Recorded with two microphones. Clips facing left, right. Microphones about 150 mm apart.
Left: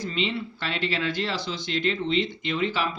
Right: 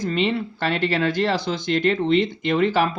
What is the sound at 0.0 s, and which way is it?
Speech, 50° right (ahead or behind).